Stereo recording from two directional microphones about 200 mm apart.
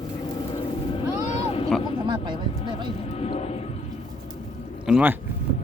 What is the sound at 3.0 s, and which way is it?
Vehicle, 30° left (ahead or behind).